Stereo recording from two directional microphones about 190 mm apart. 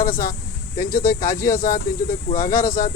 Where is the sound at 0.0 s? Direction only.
50° left (ahead or behind).